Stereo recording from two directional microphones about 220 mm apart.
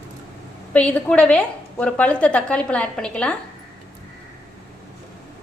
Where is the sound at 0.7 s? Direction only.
5° left (ahead or behind).